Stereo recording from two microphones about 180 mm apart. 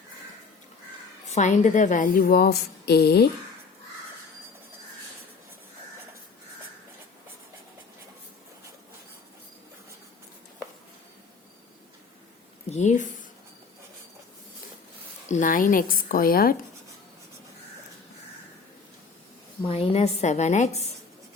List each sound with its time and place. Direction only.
1.3 s a woman's voice: 40° left (ahead or behind); by 3.2 s 65° left (ahead or behind)
12.7 s speech: 40° left (ahead or behind)
15.3 s a woman's voice: 45° left (ahead or behind)
19.6 s a woman's voice: 30° left (ahead or behind)